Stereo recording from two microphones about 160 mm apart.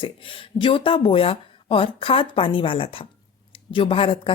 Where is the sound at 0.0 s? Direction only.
35° left (ahead or behind).